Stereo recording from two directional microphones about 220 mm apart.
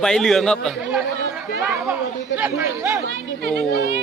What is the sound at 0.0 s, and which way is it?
Speech, centre (ahead or behind).